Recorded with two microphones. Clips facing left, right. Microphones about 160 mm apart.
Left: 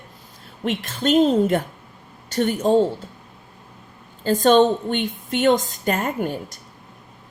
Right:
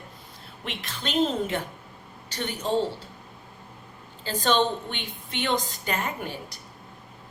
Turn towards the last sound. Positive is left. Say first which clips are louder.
# left 7 dB
turn(degrees=45)  # may be behind; listen again after turning